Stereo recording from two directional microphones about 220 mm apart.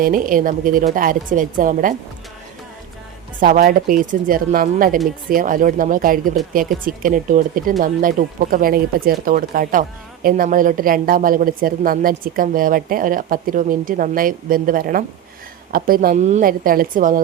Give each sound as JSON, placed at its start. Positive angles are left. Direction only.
{"t": 0.0, "sound": "a woman's voice", "side_deg": -40}
{"t": 3.4, "sound": "a woman's voice", "side_deg": -40}